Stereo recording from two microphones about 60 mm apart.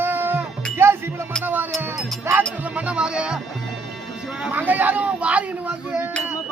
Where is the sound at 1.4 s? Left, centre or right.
Right.